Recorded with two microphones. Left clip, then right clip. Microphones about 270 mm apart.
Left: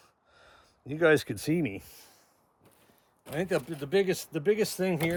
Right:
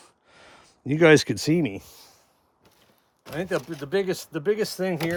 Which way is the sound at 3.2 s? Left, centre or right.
Centre.